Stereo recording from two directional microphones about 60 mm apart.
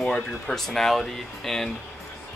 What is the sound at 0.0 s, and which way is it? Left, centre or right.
Speech, centre.